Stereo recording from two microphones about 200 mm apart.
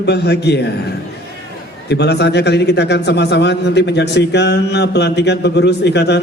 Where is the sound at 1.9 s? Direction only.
55° left (ahead or behind).